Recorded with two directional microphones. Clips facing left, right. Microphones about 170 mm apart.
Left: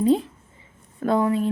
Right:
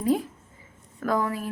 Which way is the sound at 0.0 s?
25° left (ahead or behind).